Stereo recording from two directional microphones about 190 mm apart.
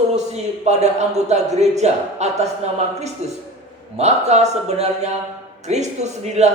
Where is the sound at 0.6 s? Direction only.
35° right (ahead or behind).